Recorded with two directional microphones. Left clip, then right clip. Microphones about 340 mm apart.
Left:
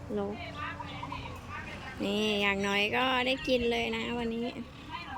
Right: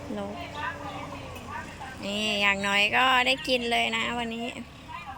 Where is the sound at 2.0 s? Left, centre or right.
Centre.